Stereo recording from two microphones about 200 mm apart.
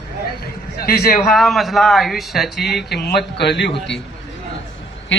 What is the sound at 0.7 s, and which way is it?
Speech, 50° left (ahead or behind).